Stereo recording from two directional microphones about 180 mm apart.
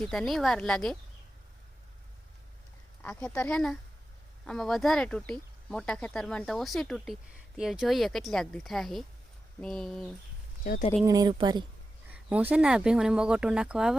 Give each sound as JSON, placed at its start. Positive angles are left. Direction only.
{"t": 0.0, "sound": "speech", "side_deg": 0}
{"t": 3.0, "sound": "speech", "side_deg": 5}
{"t": 10.6, "sound": "speech", "side_deg": 45}
{"t": 11.0, "sound": "speech", "side_deg": -20}
{"t": 12.0, "sound": "speech", "side_deg": -10}